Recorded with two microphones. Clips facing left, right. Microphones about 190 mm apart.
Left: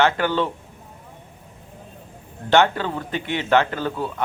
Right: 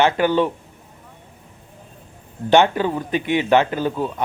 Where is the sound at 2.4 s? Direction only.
15° right (ahead or behind).